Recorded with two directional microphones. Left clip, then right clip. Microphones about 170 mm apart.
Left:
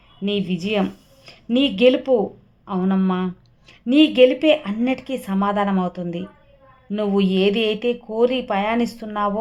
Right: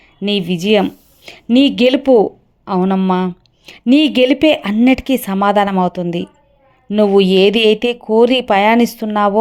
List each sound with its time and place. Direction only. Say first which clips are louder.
0.2 s a woman's voice: right 6 dB; 35° right (ahead or behind)